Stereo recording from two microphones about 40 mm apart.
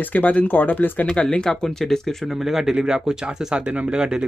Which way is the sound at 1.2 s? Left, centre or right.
Left.